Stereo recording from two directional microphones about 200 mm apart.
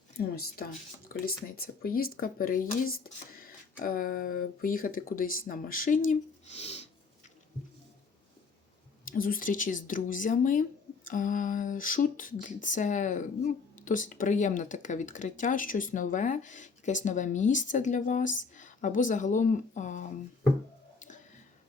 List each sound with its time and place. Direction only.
0.2 s speech: 50° left (ahead or behind)
6.1 s speech: 35° left (ahead or behind)
9.0 s speech: 45° left (ahead or behind)